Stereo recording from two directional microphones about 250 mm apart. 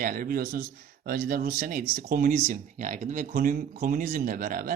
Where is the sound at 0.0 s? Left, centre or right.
Right.